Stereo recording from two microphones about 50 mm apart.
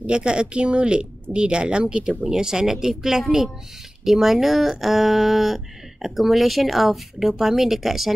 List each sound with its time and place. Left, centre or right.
0.0 s speech: right; by 8.1 s centre